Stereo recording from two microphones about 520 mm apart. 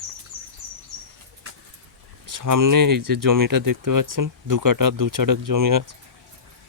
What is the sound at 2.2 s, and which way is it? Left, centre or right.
Speech, right.